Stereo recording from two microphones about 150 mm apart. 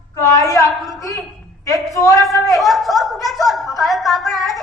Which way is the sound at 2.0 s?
20° left (ahead or behind).